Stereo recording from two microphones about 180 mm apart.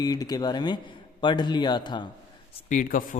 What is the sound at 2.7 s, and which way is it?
Speech, 45° left (ahead or behind).